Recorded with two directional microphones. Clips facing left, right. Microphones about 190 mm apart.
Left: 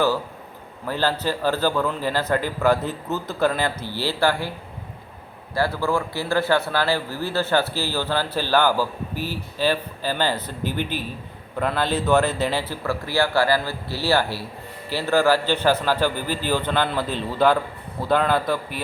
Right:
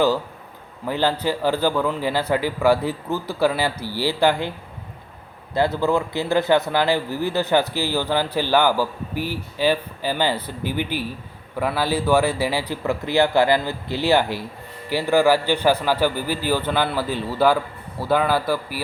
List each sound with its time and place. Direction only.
0.9 s a man's voice: 15° right (ahead or behind)
5.5 s a man's voice: 20° right (ahead or behind)